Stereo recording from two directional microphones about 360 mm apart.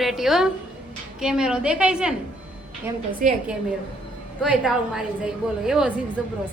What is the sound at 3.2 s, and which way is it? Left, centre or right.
Speech, right.